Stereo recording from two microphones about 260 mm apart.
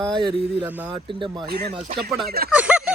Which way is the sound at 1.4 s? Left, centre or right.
Right.